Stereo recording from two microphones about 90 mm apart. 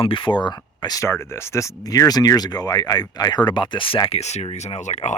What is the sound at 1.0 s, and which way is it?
Speech, 30° left (ahead or behind).